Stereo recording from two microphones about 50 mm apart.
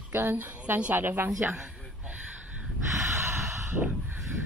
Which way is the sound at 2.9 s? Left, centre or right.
Right.